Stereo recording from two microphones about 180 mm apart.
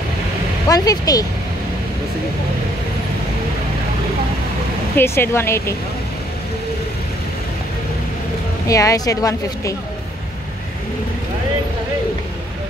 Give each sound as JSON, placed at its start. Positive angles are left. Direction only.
{"t": 0.7, "sound": "speech", "side_deg": 20}
{"t": 4.9, "sound": "speech", "side_deg": 10}
{"t": 8.6, "sound": "speech", "side_deg": 20}